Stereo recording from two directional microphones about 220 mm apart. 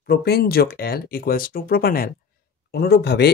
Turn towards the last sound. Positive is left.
turn(degrees=45)  # may be behind; listen again after turning